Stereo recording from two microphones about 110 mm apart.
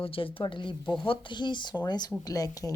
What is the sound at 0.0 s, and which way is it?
A woman's voice, 55° left (ahead or behind).